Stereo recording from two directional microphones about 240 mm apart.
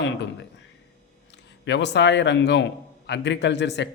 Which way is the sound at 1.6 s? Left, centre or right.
Left.